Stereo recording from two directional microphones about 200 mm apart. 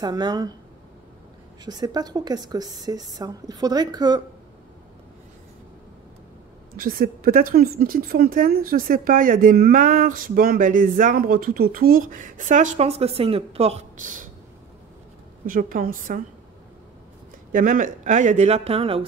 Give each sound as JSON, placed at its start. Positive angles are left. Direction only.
{"t": 0.0, "sound": "a woman's voice", "side_deg": -20}
{"t": 1.6, "sound": "a woman's voice", "side_deg": -20}
{"t": 6.8, "sound": "speech", "side_deg": -45}
{"t": 15.4, "sound": "speech", "side_deg": -45}
{"t": 17.5, "sound": "speech", "side_deg": -40}